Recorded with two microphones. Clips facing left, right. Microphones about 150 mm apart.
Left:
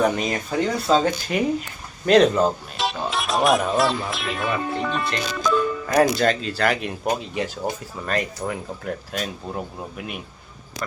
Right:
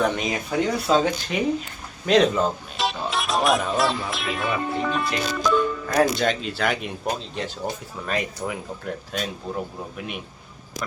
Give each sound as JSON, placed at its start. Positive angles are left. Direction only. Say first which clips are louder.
{"t": 0.0, "sound": "speech", "louder": "left 2 dB", "side_deg": 5}
{"t": 7.2, "sound": "speech", "louder": "left 4 dB", "side_deg": 10}
{"t": 8.0, "sound": "speech", "louder": "left 2 dB", "side_deg": 0}